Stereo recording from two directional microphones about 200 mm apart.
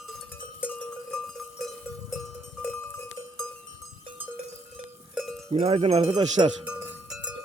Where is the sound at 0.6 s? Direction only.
5° left (ahead or behind).